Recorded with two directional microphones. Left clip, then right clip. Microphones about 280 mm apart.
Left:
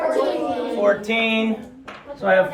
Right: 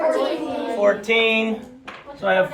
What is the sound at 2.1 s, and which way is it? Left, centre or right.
Speech, centre.